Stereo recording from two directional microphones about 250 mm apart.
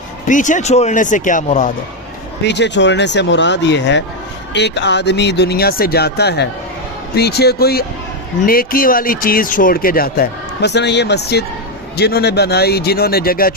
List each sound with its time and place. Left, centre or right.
0.3 s speech: left
2.4 s speech: left